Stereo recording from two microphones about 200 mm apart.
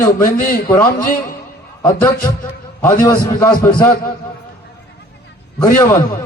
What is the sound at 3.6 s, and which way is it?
Speech, 20° left (ahead or behind).